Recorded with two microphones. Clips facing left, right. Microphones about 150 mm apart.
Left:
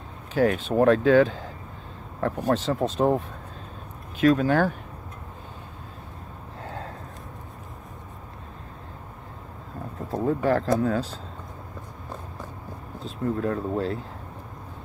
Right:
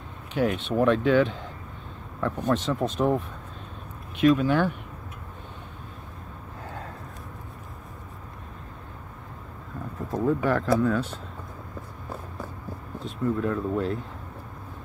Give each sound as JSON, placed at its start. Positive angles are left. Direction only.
{"t": 0.3, "sound": "speech", "side_deg": 40}
{"t": 9.9, "sound": "speech", "side_deg": 30}
{"t": 13.0, "sound": "speech", "side_deg": 30}